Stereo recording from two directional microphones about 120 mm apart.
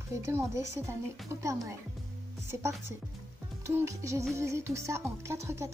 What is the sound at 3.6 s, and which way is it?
Music, 25° right (ahead or behind).